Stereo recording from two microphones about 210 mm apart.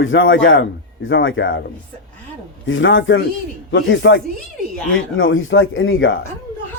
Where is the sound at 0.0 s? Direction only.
65° left (ahead or behind).